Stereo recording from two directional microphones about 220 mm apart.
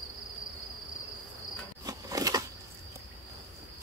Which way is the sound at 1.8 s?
15° right (ahead or behind).